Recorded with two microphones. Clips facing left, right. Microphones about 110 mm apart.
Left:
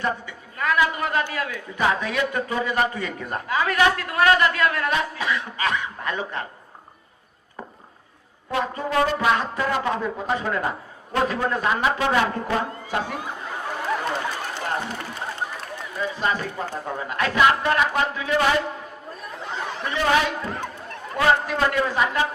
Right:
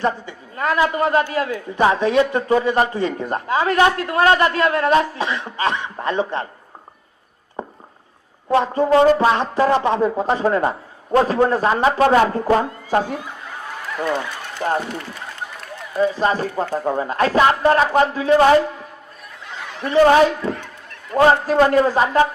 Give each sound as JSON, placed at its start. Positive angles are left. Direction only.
{"t": 0.0, "sound": "a woman's voice", "side_deg": -30}
{"t": 7.6, "sound": "a sound", "side_deg": -30}
{"t": 8.4, "sound": "a man's voice", "side_deg": -30}
{"t": 14.6, "sound": "a man's voice", "side_deg": -40}
{"t": 16.0, "sound": "a man's voice", "side_deg": -35}
{"t": 19.8, "sound": "a man's voice", "side_deg": -35}